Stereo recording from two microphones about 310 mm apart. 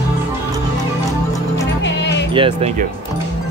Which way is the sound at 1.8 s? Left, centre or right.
Left.